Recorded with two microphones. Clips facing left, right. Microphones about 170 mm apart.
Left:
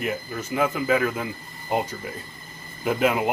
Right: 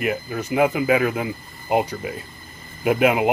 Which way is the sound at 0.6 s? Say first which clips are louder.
Right 4 dB; 10° right (ahead or behind).